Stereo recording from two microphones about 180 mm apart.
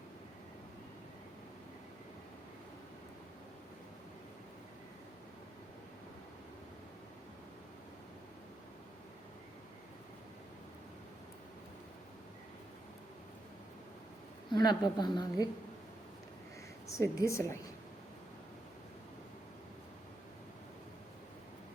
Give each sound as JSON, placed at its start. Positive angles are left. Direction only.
{"t": 14.5, "sound": "a woman's voice", "side_deg": 25}
{"t": 16.9, "sound": "a woman's voice", "side_deg": 15}